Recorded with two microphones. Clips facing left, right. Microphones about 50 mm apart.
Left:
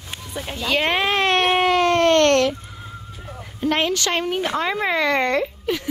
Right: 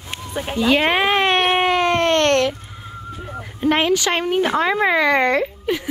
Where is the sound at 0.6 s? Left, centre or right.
Centre.